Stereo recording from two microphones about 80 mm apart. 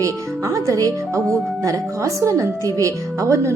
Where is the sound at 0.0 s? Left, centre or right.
Right.